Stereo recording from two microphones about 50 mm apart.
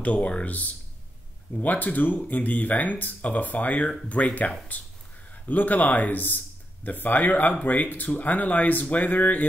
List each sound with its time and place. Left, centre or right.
0.0 s a man's voice: left